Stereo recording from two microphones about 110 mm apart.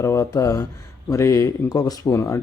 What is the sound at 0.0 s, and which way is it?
Speech, 25° left (ahead or behind).